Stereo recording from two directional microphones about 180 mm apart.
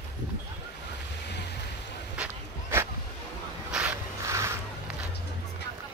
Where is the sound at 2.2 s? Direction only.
15° right (ahead or behind).